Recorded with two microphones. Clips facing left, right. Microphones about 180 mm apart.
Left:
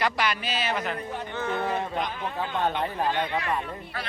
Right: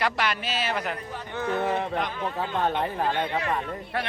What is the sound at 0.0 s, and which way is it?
Speech, centre (ahead or behind).